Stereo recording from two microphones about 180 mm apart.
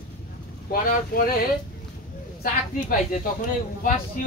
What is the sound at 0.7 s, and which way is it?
Speech, 55° left (ahead or behind).